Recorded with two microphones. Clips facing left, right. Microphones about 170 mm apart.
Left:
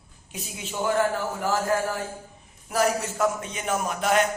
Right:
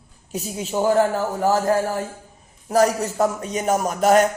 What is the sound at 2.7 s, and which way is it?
Speech, 40° right (ahead or behind).